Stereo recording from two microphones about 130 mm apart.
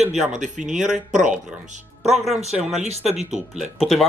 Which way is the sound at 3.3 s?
Centre (ahead or behind).